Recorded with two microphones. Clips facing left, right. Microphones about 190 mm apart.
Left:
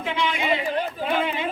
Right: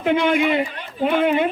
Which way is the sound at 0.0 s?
55° right (ahead or behind).